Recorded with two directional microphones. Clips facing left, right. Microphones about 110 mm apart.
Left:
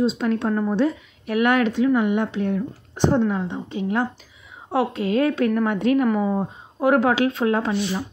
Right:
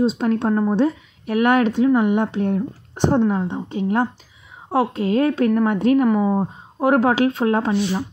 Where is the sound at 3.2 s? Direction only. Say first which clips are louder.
Right 3 dB; 25° right (ahead or behind).